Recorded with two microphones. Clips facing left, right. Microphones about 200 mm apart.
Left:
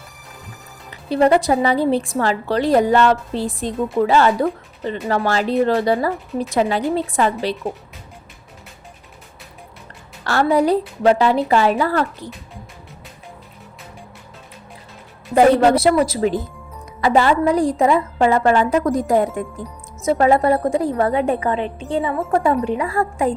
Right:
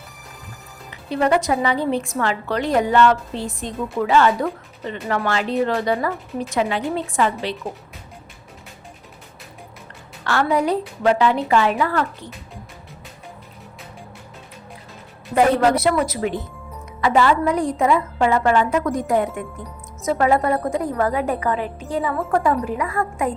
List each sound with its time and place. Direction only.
1.1 s a woman's voice: 30° left (ahead or behind)
10.2 s a woman's voice: 35° left (ahead or behind)
15.4 s a woman's voice: 30° left (ahead or behind)